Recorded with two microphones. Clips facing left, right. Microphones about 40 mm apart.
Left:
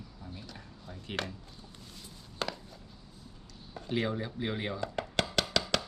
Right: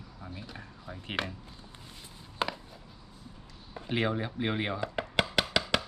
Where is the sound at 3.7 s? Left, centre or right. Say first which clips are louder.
Right 2 dB; right.